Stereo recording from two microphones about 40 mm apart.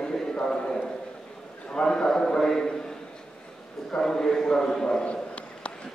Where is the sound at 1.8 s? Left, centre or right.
Centre.